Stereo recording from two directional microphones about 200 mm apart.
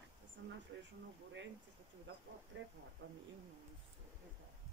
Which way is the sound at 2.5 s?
65° right (ahead or behind).